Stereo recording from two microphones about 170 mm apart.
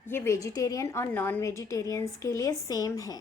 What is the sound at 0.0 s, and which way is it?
A woman's voice, 15° left (ahead or behind).